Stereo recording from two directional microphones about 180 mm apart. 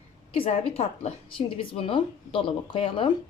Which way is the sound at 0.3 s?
30° left (ahead or behind).